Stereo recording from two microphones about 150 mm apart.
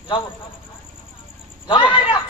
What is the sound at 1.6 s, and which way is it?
Speech, 30° left (ahead or behind).